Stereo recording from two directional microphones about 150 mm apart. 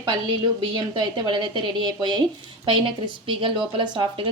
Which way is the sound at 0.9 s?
30° right (ahead or behind).